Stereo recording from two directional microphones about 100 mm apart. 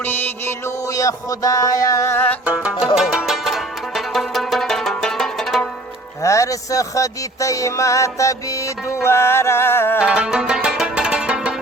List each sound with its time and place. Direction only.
0.9 s music: 35° left (ahead or behind); by 2.4 s 20° left (ahead or behind)
2.4 s music: 10° right (ahead or behind); by 5.6 s 5° left (ahead or behind)
6.2 s music: 30° left (ahead or behind)
10.0 s music: 10° right (ahead or behind)